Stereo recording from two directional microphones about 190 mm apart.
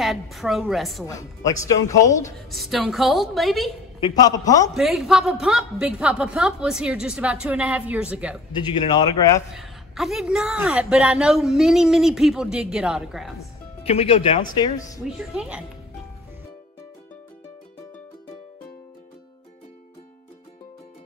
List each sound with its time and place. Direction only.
0.0 s a woman's voice: centre (ahead or behind)
1.0 s speech: 15° left (ahead or behind)
2.3 s a woman's voice: centre (ahead or behind)
4.0 s a man's voice: 20° left (ahead or behind)
4.7 s a woman's voice: centre (ahead or behind)
8.6 s a man's voice: 25° left (ahead or behind)
9.6 s a woman's voice: centre (ahead or behind)
13.8 s speech: 30° left (ahead or behind)
15.0 s a woman's voice: 5° right (ahead or behind)